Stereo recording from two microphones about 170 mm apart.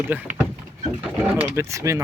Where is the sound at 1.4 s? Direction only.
15° right (ahead or behind).